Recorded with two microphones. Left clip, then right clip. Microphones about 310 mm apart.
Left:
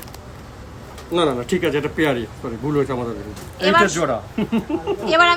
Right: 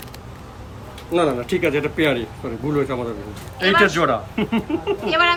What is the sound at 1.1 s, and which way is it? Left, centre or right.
Speech, centre.